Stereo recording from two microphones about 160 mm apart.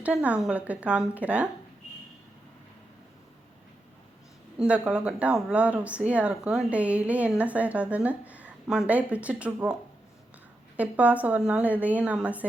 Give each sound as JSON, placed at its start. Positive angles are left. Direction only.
{"t": 0.0, "sound": "speech", "side_deg": -10}
{"t": 4.5, "sound": "speech", "side_deg": -5}
{"t": 10.8, "sound": "speech", "side_deg": -10}